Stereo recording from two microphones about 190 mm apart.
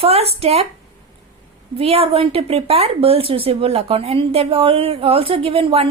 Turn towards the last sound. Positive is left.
turn(degrees=-30)  # may be behind; listen again after turning